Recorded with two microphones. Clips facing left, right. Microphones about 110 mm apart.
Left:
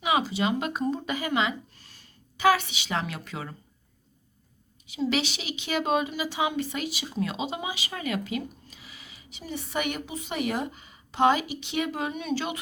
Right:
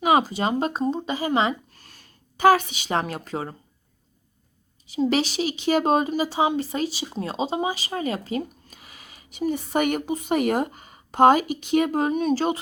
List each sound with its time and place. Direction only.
0.0 s a woman's voice: 45° right (ahead or behind)
2.4 s a woman's voice: 45° right (ahead or behind)
4.9 s a woman's voice: 40° right (ahead or behind)